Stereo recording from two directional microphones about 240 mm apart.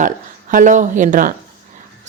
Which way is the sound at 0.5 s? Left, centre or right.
Right.